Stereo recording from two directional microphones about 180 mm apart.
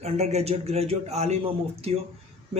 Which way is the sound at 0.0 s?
35° right (ahead or behind).